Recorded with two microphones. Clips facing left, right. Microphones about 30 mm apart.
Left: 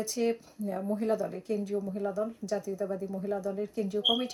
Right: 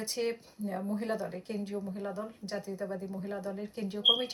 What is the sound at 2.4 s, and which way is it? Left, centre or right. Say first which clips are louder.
Speech: left 5 dB; right.